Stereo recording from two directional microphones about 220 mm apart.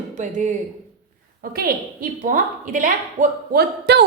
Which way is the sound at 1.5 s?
40° right (ahead or behind).